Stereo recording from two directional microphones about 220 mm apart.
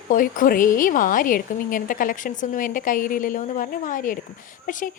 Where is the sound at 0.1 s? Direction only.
40° left (ahead or behind).